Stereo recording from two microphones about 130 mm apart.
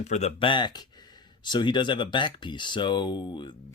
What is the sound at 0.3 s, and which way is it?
Speech, 40° left (ahead or behind).